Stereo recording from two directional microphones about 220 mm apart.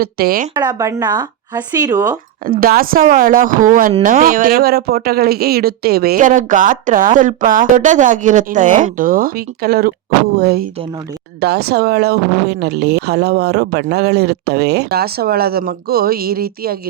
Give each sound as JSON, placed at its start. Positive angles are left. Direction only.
{"t": 0.0, "sound": "speech", "side_deg": -45}
{"t": 0.5, "sound": "speech", "side_deg": -15}
{"t": 2.5, "sound": "speech", "side_deg": -40}